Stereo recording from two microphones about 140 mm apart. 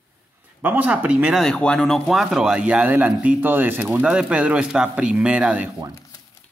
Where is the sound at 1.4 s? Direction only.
5° left (ahead or behind).